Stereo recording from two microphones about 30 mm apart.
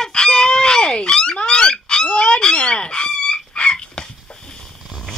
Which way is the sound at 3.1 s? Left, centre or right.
Left.